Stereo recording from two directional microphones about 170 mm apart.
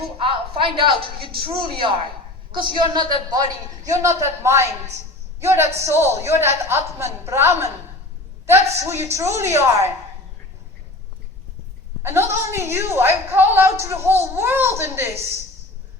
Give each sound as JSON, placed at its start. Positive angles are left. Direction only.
{"t": 0.2, "sound": "a sound", "side_deg": -30}
{"t": 1.5, "sound": "a woman's voice", "side_deg": -30}
{"t": 12.0, "sound": "a woman's voice", "side_deg": -15}